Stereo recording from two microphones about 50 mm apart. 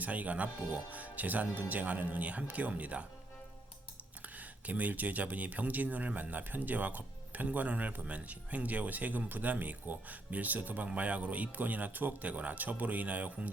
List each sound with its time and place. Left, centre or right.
0.0 s speech: right
4.4 s speech: right